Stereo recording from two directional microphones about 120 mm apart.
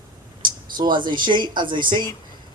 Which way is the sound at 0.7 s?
40° right (ahead or behind).